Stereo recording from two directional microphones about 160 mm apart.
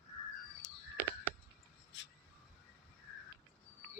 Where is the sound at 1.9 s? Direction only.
90° left.